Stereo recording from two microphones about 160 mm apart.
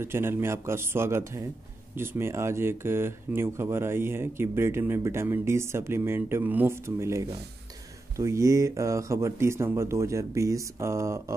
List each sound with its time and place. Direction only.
0.0 s speech: 15° right (ahead or behind)